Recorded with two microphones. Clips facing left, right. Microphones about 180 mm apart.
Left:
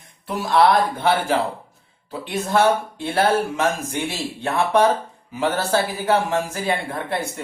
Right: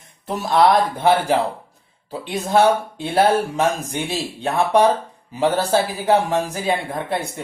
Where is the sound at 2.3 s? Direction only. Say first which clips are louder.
Right 2 dB; 15° right (ahead or behind).